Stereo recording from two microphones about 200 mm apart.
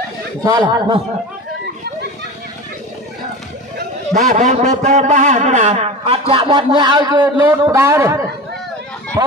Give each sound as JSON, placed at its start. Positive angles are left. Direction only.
{"t": 0.4, "sound": "speech", "side_deg": -20}
{"t": 4.3, "sound": "speech", "side_deg": -35}